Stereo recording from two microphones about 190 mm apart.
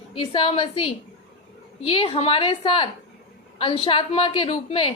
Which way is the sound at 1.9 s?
30° left (ahead or behind).